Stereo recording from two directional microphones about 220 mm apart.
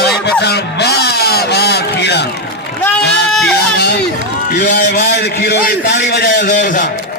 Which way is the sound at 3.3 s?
Centre (ahead or behind).